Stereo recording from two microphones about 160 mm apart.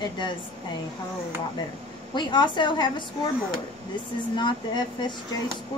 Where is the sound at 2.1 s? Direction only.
30° left (ahead or behind).